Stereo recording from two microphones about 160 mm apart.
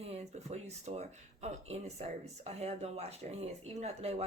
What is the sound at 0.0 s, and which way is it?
Speech, 40° right (ahead or behind).